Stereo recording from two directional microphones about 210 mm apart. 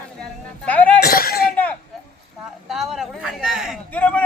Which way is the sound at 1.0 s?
45° left (ahead or behind).